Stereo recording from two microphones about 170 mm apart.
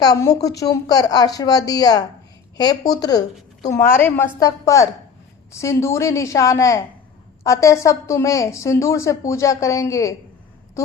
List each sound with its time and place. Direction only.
0.0 s a woman's voice: 20° left (ahead or behind)